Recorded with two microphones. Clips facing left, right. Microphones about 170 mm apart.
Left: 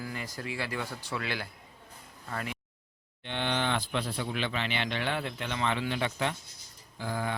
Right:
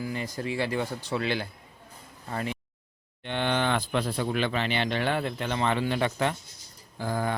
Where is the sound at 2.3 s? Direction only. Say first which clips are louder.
Right 5 dB; 25° right (ahead or behind).